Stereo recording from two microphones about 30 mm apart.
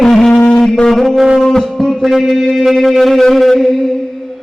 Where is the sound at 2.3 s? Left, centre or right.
Centre.